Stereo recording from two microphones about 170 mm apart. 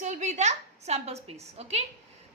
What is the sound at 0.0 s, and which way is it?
A woman's voice, 45° right (ahead or behind).